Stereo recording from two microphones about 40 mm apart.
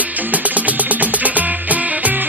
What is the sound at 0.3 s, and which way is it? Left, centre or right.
Music, right.